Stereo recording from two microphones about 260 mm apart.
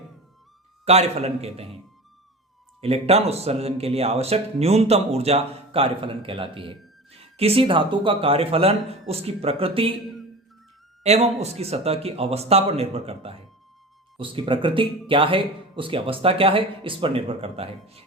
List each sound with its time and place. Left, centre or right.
0.9 s speech: right
2.8 s speech: right
11.0 s speech: right